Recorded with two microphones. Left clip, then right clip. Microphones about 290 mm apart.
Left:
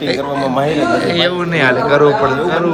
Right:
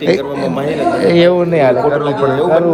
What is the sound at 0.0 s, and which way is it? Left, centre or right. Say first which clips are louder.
A man's voice: right 2 dB; centre.